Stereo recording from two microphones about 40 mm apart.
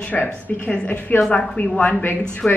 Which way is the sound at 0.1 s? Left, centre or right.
Left.